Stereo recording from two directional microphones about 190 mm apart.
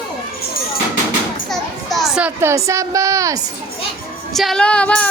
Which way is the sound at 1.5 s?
Centre (ahead or behind).